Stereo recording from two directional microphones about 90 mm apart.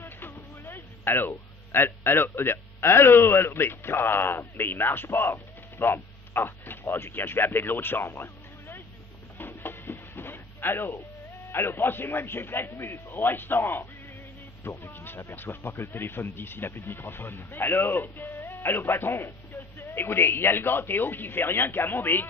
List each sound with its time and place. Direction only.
0.0 s speech: 25° left (ahead or behind)
9.4 s music: 25° left (ahead or behind)
11.5 s speech: 25° left (ahead or behind)